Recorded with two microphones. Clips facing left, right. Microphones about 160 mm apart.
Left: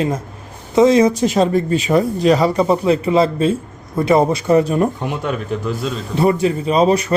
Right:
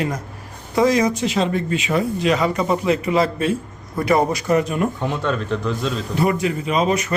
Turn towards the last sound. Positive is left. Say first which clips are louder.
# left 5 dB
turn(degrees=30)  # may be behind; listen again after turning